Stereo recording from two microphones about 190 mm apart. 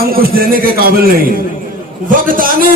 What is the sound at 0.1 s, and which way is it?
A man's voice, 50° right (ahead or behind).